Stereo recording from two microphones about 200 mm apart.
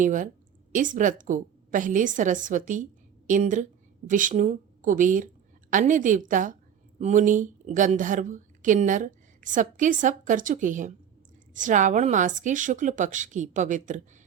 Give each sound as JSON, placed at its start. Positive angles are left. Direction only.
{"t": 0.0, "sound": "a woman's voice", "side_deg": -40}